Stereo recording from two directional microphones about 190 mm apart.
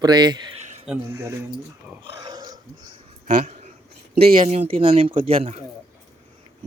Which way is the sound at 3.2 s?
35° right (ahead or behind).